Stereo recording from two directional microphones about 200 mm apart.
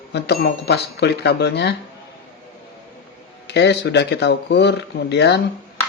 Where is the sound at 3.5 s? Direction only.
60° left (ahead or behind).